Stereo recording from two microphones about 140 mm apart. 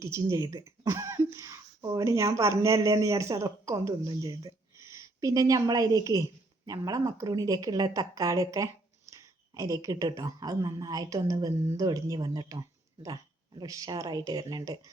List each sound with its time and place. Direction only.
0.0 s a woman's voice: 20° right (ahead or behind)